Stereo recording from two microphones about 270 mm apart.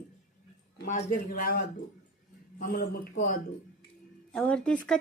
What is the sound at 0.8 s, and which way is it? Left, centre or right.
Speech, left.